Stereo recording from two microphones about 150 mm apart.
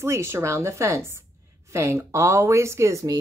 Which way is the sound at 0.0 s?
15° right (ahead or behind).